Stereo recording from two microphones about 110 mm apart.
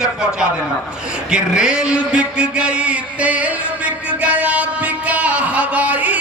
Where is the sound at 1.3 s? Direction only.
5° right (ahead or behind).